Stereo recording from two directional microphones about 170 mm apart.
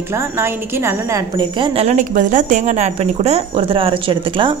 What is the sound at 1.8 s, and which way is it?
Speech, 50° right (ahead or behind).